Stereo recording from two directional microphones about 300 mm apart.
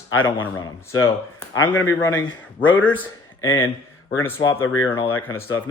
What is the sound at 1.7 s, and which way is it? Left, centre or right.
A man's voice, centre.